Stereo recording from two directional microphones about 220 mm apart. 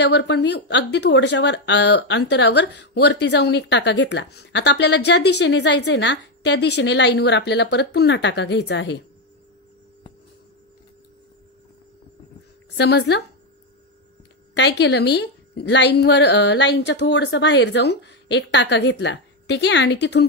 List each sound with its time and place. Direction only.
0.0 s speech: 50° left (ahead or behind)
12.7 s speech: 50° left (ahead or behind)
14.5 s speech: 50° left (ahead or behind)